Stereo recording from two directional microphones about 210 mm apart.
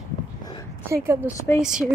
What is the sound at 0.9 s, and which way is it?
Speech, 10° right (ahead or behind).